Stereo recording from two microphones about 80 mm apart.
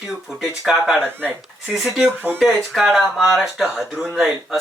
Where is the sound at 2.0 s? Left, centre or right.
Right.